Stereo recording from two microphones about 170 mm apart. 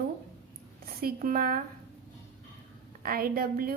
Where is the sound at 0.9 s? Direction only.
60° right (ahead or behind).